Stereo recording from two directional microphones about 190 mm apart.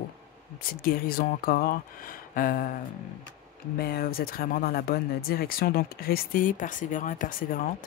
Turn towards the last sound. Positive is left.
turn(degrees=50)  # may be behind; listen again after turning